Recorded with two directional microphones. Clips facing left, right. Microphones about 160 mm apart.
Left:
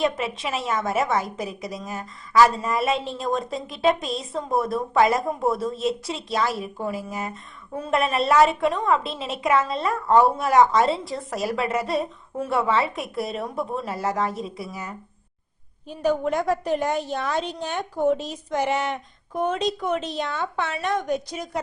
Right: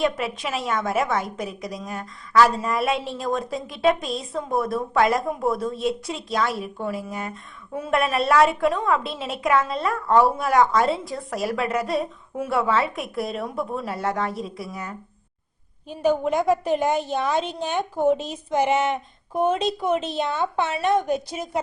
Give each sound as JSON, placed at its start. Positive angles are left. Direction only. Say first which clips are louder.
{"t": 0.0, "sound": "a woman's voice", "louder": "even", "side_deg": 0}
{"t": 16.0, "sound": "a woman's voice", "louder": "right 2 dB", "side_deg": -20}
{"t": 17.4, "sound": "a woman's voice", "louder": "right 1 dB", "side_deg": 0}
{"t": 17.7, "sound": "a woman's voice", "louder": "right 2 dB", "side_deg": -20}